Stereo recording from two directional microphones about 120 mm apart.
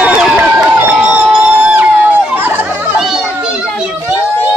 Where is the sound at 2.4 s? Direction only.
15° right (ahead or behind).